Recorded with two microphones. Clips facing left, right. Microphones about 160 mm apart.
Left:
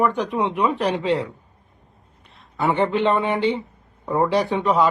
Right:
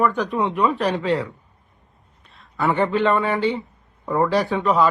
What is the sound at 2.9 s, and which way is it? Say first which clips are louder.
Speech: even; 20° left (ahead or behind).